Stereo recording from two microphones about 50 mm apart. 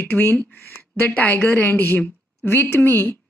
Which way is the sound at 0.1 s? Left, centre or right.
Left.